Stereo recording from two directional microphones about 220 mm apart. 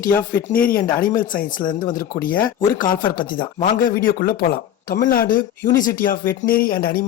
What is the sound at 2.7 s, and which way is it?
Speech, 40° left (ahead or behind).